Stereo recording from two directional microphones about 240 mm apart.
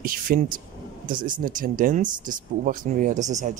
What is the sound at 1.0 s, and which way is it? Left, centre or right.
Speech, right.